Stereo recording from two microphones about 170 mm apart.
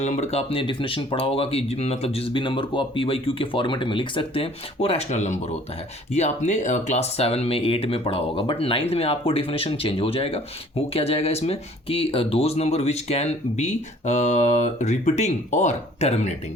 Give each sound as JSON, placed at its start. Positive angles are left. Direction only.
{"t": 0.0, "sound": "speech", "side_deg": 40}